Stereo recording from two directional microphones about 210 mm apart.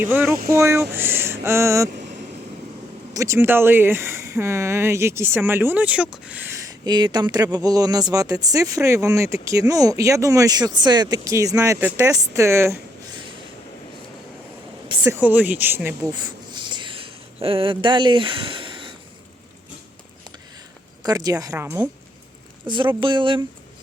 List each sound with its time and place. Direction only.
0.0 s speech: 10° right (ahead or behind)
3.1 s speech: 15° right (ahead or behind)
15.0 s speech: 10° right (ahead or behind)
16.1 s a sound: 20° right (ahead or behind)
21.0 s speech: 20° right (ahead or behind)